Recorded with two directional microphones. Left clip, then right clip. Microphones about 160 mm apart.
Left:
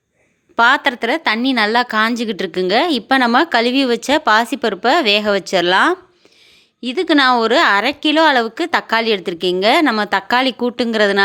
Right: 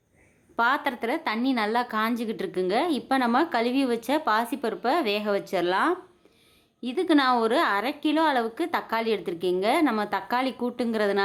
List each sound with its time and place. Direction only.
0.5 s a woman's voice: 25° left (ahead or behind)